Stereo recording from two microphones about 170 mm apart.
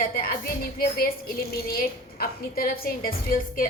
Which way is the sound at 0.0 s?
60° left (ahead or behind).